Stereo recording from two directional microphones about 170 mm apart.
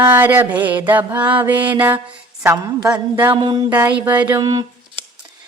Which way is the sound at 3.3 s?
25° right (ahead or behind).